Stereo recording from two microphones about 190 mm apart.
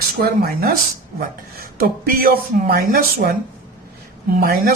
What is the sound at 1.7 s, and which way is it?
Speech, 50° right (ahead or behind).